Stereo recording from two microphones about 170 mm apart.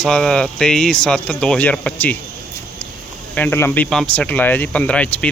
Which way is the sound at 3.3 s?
10° left (ahead or behind).